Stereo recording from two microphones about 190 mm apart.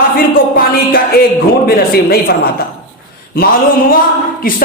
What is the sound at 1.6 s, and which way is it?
Speech, 55° left (ahead or behind).